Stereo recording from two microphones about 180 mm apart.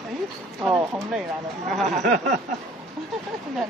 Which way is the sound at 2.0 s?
45° right (ahead or behind).